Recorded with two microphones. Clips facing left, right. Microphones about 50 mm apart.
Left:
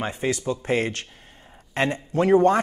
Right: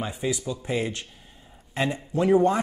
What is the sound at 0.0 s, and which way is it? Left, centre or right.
Speech, left.